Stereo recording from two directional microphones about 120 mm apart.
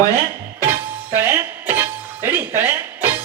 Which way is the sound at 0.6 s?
20° right (ahead or behind).